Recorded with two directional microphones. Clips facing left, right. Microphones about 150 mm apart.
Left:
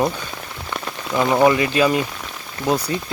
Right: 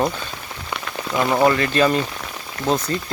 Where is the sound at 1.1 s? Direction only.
Centre (ahead or behind).